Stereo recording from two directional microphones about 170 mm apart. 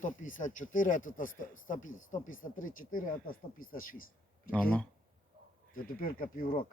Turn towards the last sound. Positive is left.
turn(degrees=55)  # may be behind; listen again after turning